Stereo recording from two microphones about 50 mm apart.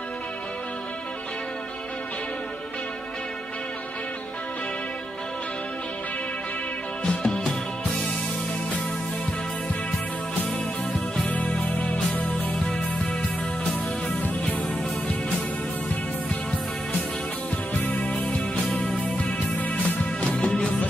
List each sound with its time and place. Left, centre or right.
7.1 s music: centre
11.2 s music: left
12.5 s music: centre
17.8 s music: left
19.6 s music: left